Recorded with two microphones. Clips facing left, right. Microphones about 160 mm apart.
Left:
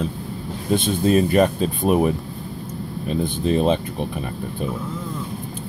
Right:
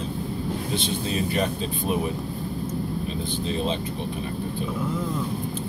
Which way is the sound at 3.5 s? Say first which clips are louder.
Left 9 dB; 55° left (ahead or behind).